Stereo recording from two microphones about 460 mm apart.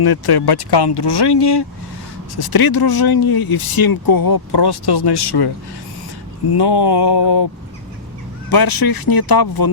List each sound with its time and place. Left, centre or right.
0.0 s speech: left
6.5 s speech: left
8.4 s speech: left